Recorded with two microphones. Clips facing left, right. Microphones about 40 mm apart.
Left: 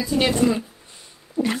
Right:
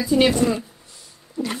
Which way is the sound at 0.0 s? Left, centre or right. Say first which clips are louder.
Right 4 dB; centre.